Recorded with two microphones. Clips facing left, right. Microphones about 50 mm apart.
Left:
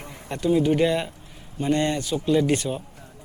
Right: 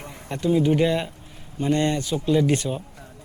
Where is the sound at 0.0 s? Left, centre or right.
Centre.